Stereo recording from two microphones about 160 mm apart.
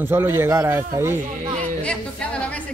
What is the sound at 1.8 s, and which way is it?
Speech, 10° left (ahead or behind).